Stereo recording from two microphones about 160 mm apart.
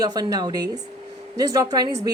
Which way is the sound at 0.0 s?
25° right (ahead or behind).